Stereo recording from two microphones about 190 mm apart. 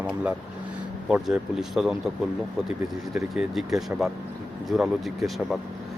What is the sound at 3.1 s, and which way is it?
Speech, centre (ahead or behind).